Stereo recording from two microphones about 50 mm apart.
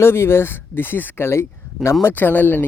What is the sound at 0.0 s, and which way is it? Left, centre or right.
Speech, left.